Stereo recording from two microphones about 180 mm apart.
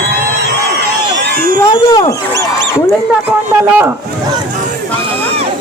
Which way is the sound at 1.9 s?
20° left (ahead or behind).